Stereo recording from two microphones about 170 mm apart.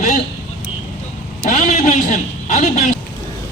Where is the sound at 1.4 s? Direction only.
50° left (ahead or behind).